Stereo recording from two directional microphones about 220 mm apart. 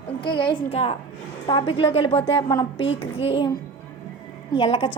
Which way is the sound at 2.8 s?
55° left (ahead or behind).